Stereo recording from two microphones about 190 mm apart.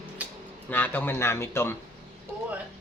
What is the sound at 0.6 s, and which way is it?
A man's voice, 10° left (ahead or behind).